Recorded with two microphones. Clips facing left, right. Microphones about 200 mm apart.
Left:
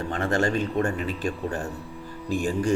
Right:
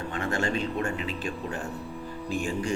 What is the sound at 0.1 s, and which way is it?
Speech, 40° left (ahead or behind).